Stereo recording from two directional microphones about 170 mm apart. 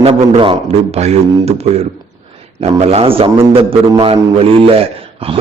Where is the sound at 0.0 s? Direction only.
35° right (ahead or behind).